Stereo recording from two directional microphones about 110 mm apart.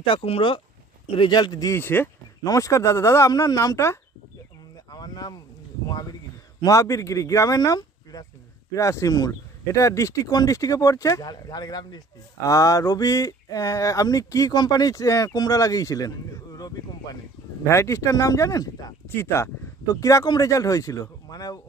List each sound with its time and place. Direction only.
0.0 s speech: 55° left (ahead or behind); by 1.8 s 35° left (ahead or behind)
1.8 s speech: 20° left (ahead or behind)
2.4 s speech: 30° left (ahead or behind)
4.8 s a sound: 35° left (ahead or behind)
6.6 s speech: 30° left (ahead or behind)